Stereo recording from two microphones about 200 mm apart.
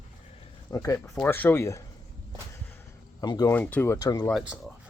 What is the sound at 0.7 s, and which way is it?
Speech, 15° left (ahead or behind).